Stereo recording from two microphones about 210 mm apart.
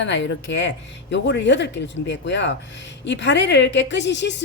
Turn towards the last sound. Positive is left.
turn(degrees=55)  # may be behind; listen again after turning